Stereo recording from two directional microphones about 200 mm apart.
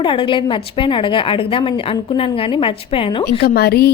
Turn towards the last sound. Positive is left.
turn(degrees=50)  # may be behind; listen again after turning